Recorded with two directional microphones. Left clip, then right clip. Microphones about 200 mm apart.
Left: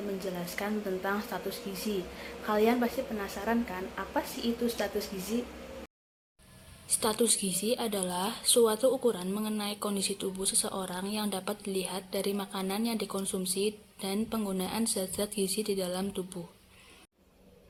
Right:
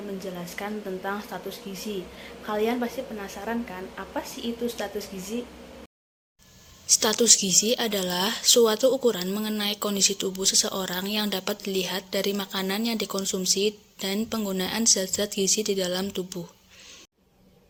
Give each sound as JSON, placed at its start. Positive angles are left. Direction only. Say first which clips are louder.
{"t": 0.3, "sound": "speech", "louder": "right 1 dB", "side_deg": 0}
{"t": 7.0, "sound": "a woman's voice", "louder": "right 6 dB", "side_deg": -30}